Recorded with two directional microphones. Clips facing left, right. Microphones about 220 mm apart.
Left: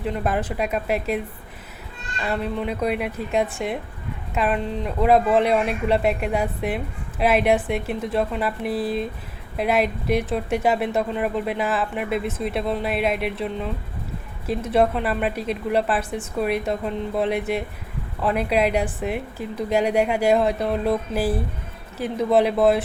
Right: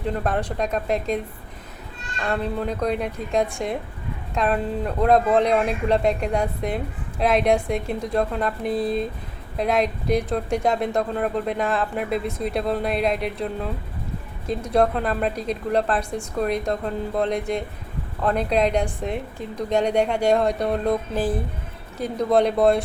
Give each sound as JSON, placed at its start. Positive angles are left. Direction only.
{"t": 0.0, "sound": "a woman's voice", "side_deg": 5}